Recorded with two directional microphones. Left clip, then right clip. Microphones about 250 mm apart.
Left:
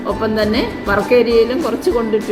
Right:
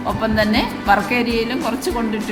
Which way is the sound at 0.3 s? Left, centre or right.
Centre.